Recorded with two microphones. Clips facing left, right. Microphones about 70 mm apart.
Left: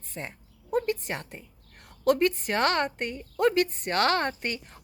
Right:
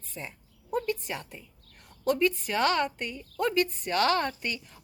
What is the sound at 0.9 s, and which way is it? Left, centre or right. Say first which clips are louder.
A woman's voice: left 2 dB; left.